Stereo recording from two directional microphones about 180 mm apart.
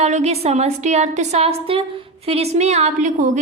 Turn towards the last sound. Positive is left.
turn(degrees=-40)  # may be behind; listen again after turning